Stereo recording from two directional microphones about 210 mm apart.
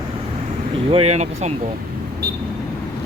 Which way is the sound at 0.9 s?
30° right (ahead or behind).